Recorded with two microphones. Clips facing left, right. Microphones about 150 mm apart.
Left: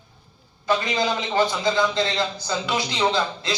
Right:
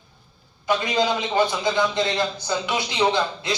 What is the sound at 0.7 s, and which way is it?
A man's voice, 15° right (ahead or behind).